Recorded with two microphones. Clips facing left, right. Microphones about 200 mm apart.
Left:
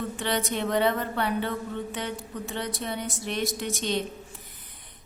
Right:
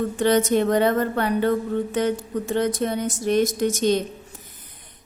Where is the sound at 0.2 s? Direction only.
45° right (ahead or behind).